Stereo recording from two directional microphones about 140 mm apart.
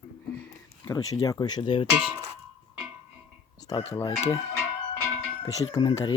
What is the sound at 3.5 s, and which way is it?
Chicken, 25° left (ahead or behind).